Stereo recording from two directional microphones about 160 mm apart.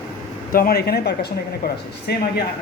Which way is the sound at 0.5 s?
70° left (ahead or behind).